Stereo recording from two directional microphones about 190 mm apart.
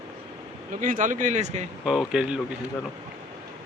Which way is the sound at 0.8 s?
45° right (ahead or behind).